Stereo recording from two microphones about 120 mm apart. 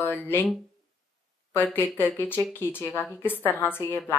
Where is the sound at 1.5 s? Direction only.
15° left (ahead or behind).